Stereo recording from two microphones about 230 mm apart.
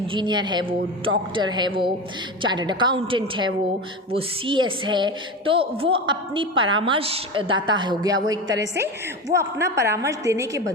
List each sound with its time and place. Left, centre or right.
0.1 s a woman's voice: centre